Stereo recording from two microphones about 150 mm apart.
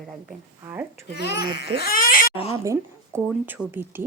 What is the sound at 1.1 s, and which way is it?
A child's voice, 90° left.